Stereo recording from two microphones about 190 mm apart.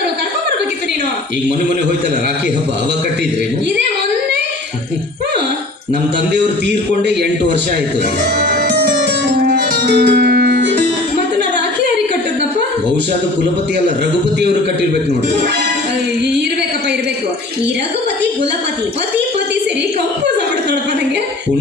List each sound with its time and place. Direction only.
9.5 s music: 55° right (ahead or behind)